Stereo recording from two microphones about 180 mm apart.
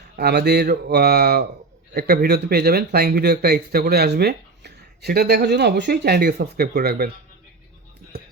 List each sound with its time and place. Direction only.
0.2 s speech: 65° right (ahead or behind)